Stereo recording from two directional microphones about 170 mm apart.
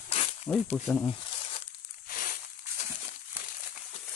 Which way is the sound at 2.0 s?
60° left (ahead or behind).